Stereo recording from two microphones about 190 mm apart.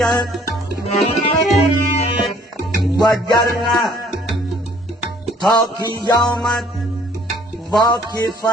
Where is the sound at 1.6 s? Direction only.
30° left (ahead or behind).